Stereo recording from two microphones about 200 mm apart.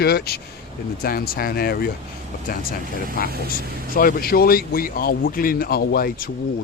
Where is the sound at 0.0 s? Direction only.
50° left (ahead or behind).